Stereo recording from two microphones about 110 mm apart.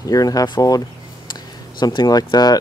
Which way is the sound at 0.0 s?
35° left (ahead or behind).